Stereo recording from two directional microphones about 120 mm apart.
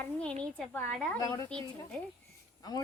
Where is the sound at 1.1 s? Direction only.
30° left (ahead or behind).